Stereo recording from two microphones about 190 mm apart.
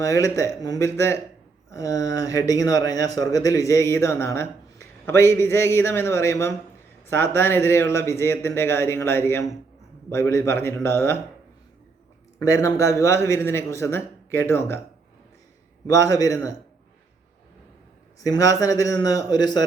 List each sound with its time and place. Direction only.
0.0 s speech: 15° left (ahead or behind)
12.4 s speech: 15° left (ahead or behind)
15.9 s speech: 20° left (ahead or behind)
18.2 s a man's voice: 20° left (ahead or behind)